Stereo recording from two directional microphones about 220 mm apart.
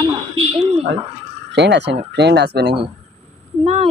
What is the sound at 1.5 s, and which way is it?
Speech, 50° right (ahead or behind).